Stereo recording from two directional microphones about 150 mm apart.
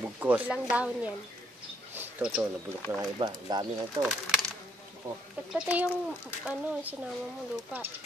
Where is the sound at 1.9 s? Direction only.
10° right (ahead or behind).